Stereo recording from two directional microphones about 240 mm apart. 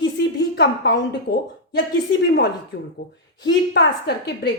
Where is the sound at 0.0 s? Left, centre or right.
Left.